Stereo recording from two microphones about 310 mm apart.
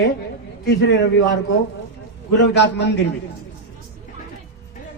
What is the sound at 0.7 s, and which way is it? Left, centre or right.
Speech, left.